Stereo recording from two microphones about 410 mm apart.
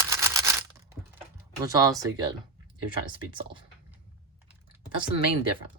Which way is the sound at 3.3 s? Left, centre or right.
Centre.